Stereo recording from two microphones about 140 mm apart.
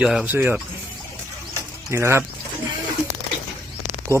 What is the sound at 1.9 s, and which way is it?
Speech, 20° right (ahead or behind).